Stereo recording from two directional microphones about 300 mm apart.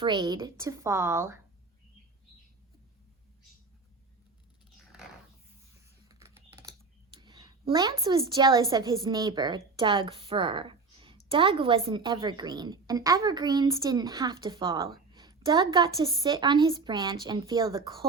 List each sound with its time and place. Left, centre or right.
0.0 s a woman's voice: centre
6.1 s computer keyboard: centre
7.2 s a woman's voice: centre